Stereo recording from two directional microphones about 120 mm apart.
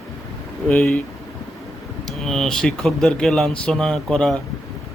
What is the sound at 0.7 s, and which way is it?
Speech, 5° left (ahead or behind).